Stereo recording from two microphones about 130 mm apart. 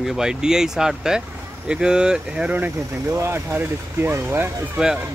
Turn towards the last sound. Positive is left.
turn(degrees=-5)  # may be behind; listen again after turning